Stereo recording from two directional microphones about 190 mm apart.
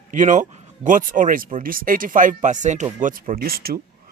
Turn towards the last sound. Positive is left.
turn(degrees=-50)  # may be behind; listen again after turning